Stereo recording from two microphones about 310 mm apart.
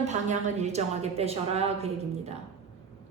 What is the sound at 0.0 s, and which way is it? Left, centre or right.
A woman's voice, right.